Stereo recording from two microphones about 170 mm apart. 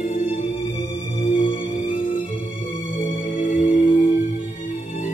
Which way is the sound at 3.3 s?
50° left (ahead or behind).